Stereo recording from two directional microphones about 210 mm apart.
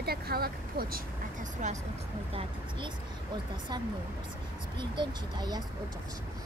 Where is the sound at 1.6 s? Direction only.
35° right (ahead or behind).